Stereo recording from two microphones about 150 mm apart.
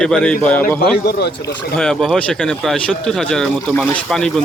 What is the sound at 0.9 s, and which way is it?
Speech, 90° left.